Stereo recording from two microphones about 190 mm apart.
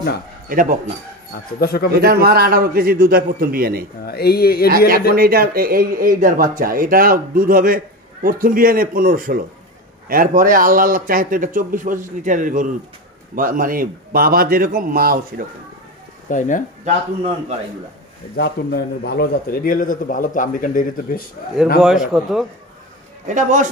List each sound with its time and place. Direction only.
0.5 s speech: 45° right (ahead or behind)
1.6 s speech: 55° left (ahead or behind)
2.0 s speech: 55° right (ahead or behind)
4.0 s a man's voice: 55° left (ahead or behind)
4.6 s speech: 50° right (ahead or behind)
16.3 s a man's voice: 45° left (ahead or behind)
18.3 s a man's voice: 60° left (ahead or behind)
21.8 s a man's voice: 5° right (ahead or behind)
23.2 s a man's voice: 40° right (ahead or behind)